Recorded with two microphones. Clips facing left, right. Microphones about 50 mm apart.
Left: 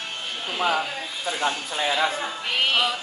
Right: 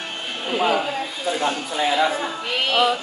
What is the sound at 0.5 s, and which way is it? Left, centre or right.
Speech, centre.